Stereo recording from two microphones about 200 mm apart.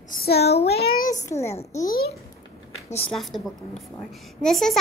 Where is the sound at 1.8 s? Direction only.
50° left (ahead or behind).